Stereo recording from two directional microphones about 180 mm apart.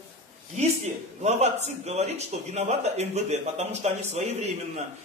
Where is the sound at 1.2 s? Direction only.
40° right (ahead or behind).